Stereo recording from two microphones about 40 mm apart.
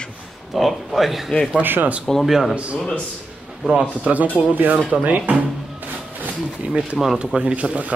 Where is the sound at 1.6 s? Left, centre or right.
Right.